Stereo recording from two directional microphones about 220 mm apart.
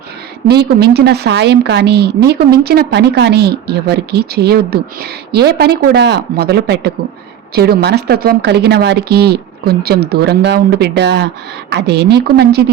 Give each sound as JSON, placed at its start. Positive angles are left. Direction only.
{"t": 0.4, "sound": "a woman's voice", "side_deg": -50}